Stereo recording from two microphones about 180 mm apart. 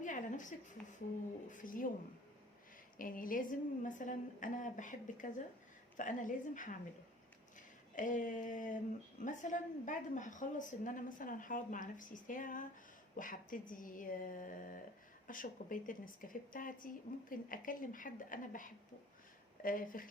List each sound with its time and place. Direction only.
0.0 s a sound: 45° left (ahead or behind)
0.8 s speech: 10° left (ahead or behind)
1.5 s a woman's voice: 50° left (ahead or behind)
3.0 s a woman's voice: 50° left (ahead or behind)
7.9 s a woman's voice: 45° left (ahead or behind)